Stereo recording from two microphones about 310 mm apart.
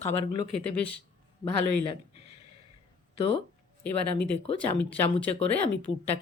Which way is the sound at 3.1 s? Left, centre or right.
Centre.